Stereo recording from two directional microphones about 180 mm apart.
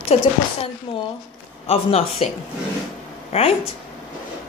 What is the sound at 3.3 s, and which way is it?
Speech, 35° left (ahead or behind).